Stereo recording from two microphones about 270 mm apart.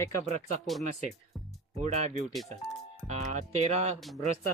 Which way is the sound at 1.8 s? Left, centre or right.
Right.